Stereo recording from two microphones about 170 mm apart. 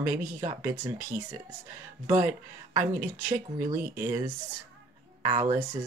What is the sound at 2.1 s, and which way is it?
Speech, 15° right (ahead or behind).